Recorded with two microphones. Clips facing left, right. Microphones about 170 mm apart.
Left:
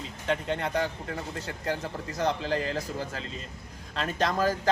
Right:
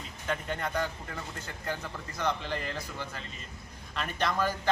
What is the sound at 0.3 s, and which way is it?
Speech, 25° left (ahead or behind).